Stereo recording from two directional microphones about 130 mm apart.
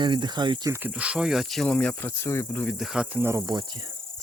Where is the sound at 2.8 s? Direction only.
5° right (ahead or behind).